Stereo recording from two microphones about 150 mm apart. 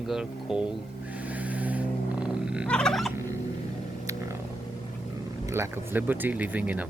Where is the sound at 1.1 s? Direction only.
10° right (ahead or behind).